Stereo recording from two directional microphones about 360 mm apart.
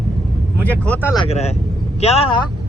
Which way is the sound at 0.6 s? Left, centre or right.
Centre.